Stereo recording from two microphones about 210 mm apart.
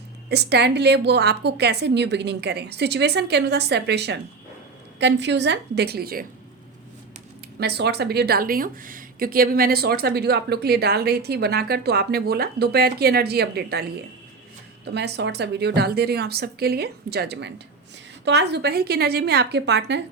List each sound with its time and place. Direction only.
0.3 s a woman's voice: 50° right (ahead or behind)
7.6 s a woman's voice: 50° right (ahead or behind)
14.9 s a woman's voice: 55° right (ahead or behind)